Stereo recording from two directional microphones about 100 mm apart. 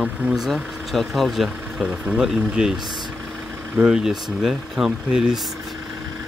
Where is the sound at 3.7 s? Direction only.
5° right (ahead or behind).